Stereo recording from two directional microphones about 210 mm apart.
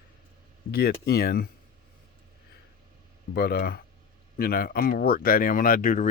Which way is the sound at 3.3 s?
50° left (ahead or behind).